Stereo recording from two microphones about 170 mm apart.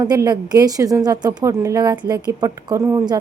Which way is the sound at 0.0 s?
25° right (ahead or behind).